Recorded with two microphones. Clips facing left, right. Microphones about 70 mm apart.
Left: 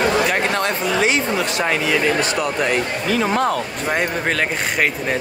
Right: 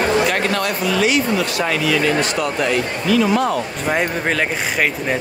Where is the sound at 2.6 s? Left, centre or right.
Left.